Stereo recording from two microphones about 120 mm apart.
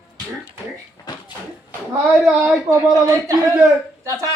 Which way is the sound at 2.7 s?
30° right (ahead or behind).